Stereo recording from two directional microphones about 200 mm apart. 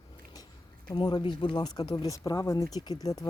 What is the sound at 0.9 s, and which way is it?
Speech, 20° left (ahead or behind).